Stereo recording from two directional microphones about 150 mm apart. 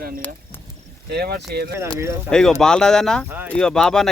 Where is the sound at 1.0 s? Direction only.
90° right.